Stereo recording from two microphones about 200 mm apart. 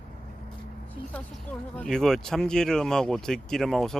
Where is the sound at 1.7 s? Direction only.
5° left (ahead or behind).